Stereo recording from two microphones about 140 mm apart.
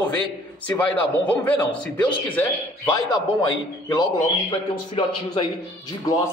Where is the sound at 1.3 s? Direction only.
10° left (ahead or behind).